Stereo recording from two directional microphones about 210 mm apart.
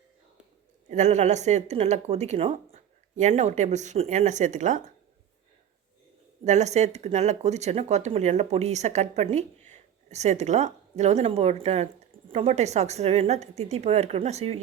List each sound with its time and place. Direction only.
0.9 s speech: 35° right (ahead or behind)
6.4 s speech: 35° right (ahead or behind)